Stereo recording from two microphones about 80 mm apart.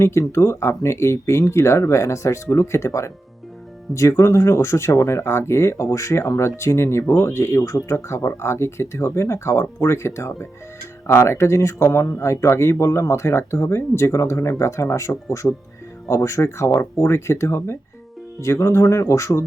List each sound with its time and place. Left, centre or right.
0.0 s speech: left